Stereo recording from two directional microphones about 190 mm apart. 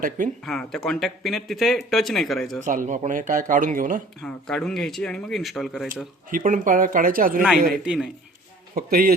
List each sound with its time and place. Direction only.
0.4 s speech: centre (ahead or behind)
2.6 s speech: 40° right (ahead or behind)
4.2 s speech: 5° left (ahead or behind)
6.3 s speech: 45° right (ahead or behind)
7.9 s speech: 5° right (ahead or behind)
8.7 s speech: 50° right (ahead or behind)